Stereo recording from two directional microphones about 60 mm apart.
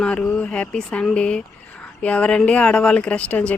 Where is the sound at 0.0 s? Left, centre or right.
Centre.